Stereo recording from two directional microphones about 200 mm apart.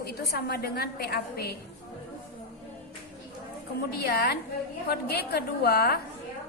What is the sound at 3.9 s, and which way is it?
A woman's voice, 50° left (ahead or behind).